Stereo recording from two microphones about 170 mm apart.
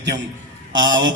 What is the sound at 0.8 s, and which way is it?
Music, 90° right.